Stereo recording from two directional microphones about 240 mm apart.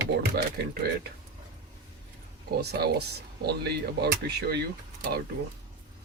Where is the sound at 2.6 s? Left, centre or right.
Right.